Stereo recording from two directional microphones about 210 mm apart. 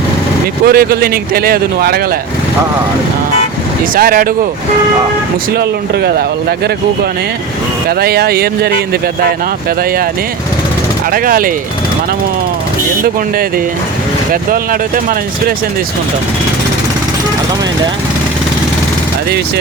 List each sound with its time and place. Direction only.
0.6 s speech: 45° right (ahead or behind)
3.9 s speech: 45° right (ahead or behind)
5.5 s speech: 50° right (ahead or behind)
7.9 s speech: 50° right (ahead or behind)
11.1 s speech: 40° right (ahead or behind)
14.5 s speech: 45° right (ahead or behind)